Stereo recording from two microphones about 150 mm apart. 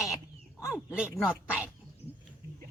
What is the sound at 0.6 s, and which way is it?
Speech, 20° left (ahead or behind).